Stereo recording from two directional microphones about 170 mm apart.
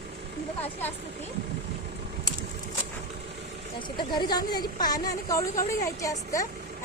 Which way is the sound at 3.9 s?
25° left (ahead or behind).